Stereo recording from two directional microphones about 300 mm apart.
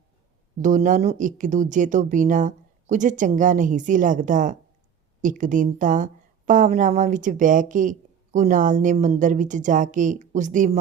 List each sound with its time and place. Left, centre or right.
0.6 s a woman's voice: right